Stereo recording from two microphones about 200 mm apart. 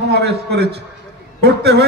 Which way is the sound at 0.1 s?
55° right (ahead or behind).